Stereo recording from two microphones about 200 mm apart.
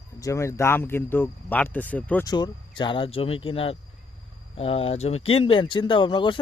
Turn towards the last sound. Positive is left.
turn(degrees=25)  # may be behind; listen again after turning